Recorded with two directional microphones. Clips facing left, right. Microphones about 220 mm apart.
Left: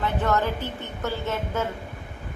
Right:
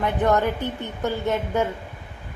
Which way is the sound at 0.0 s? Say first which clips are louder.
Right 4 dB; 20° right (ahead or behind).